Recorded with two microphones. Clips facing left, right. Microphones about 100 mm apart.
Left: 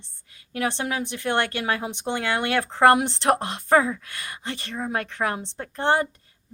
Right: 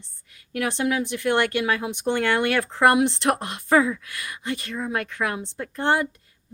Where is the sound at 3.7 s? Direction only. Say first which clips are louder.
Even; 30° left (ahead or behind).